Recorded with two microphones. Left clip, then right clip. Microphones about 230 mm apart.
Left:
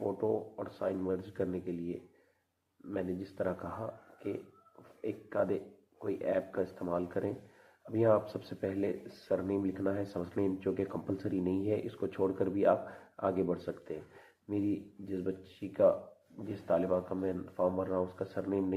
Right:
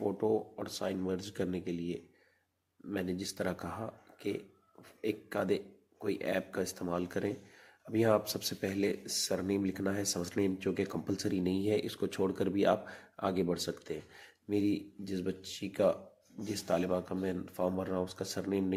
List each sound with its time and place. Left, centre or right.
0.2 s speech: right